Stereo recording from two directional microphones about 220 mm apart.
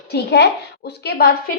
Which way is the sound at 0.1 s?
50° left (ahead or behind).